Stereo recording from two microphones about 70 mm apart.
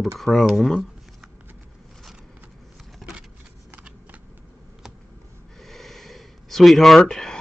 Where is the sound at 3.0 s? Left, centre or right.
Centre.